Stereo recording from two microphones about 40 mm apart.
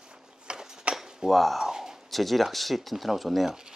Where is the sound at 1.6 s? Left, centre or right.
Centre.